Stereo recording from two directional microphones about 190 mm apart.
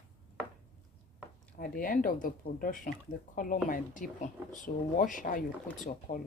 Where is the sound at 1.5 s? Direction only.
50° left (ahead or behind).